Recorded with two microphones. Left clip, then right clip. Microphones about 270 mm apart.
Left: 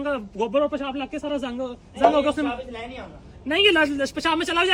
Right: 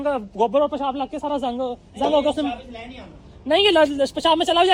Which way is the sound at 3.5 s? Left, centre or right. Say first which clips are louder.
Right 2 dB; centre.